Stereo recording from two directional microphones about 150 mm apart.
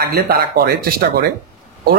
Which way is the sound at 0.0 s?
90° right.